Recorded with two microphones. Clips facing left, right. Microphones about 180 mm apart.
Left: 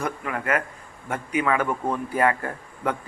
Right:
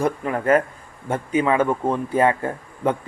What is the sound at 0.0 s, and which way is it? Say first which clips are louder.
A man's voice: right 7 dB; 30° right (ahead or behind).